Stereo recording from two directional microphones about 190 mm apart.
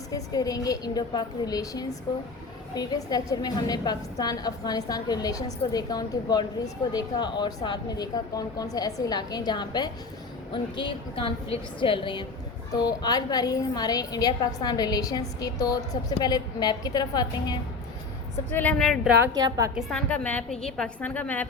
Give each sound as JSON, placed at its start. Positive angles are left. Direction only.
{"t": 0.1, "sound": "a woman's voice", "side_deg": 20}
{"t": 18.5, "sound": "a woman's voice", "side_deg": 5}
{"t": 19.2, "sound": "a woman's voice", "side_deg": -20}
{"t": 19.7, "sound": "a woman's voice", "side_deg": 5}